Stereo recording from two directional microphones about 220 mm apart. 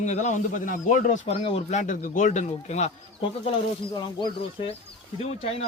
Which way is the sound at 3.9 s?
20° left (ahead or behind).